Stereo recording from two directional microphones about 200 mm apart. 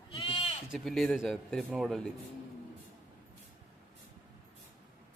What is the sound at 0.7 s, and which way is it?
Speech, centre (ahead or behind).